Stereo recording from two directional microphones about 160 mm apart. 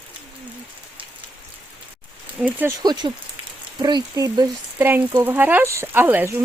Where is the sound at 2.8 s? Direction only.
25° right (ahead or behind).